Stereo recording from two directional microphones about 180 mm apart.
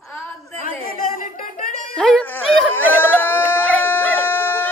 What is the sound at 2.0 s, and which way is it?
Music, 5° left (ahead or behind).